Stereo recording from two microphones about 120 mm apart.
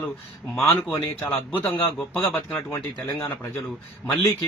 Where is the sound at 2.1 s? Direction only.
15° left (ahead or behind).